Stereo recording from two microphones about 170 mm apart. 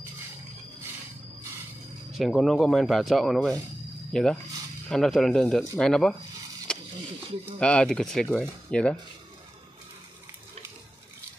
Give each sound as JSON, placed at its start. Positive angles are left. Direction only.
{"t": 2.1, "sound": "speech", "side_deg": 0}
{"t": 6.7, "sound": "a sound", "side_deg": 5}
{"t": 7.5, "sound": "speech", "side_deg": 5}